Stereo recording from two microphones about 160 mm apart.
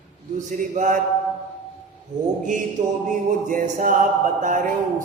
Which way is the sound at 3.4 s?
55° right (ahead or behind).